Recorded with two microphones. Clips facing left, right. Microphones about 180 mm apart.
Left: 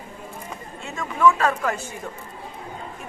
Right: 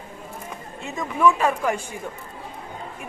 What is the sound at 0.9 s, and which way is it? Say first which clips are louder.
Speech: even; 15° right (ahead or behind).